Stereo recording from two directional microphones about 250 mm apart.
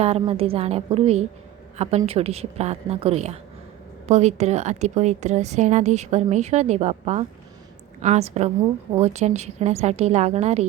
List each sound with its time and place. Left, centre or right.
0.0 s a woman's voice: right